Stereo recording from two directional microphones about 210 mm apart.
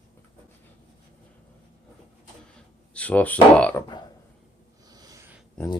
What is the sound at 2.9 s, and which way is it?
Speech, 5° left (ahead or behind).